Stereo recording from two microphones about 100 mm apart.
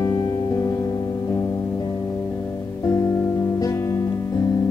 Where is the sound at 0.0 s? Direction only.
30° left (ahead or behind).